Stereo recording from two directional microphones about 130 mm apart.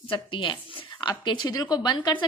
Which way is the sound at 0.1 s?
40° left (ahead or behind).